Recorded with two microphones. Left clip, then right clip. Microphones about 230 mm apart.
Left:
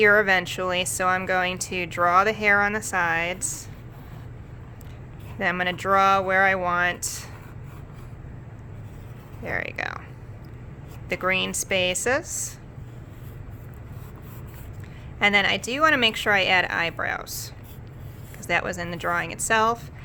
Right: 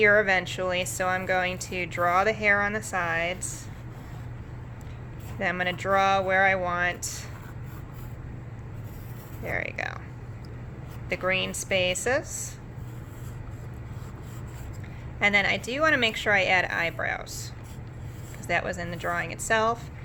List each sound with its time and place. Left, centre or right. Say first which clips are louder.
0.0 s speech: left 3 dB; left
5.4 s speech: left 3 dB; left
9.4 s speech: left 2 dB; centre
11.1 s speech: left 3 dB; left
15.2 s speech: left 3 dB; centre